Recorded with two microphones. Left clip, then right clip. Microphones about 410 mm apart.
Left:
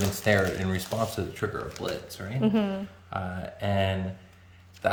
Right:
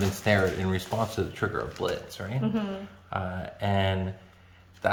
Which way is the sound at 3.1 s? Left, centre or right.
Centre.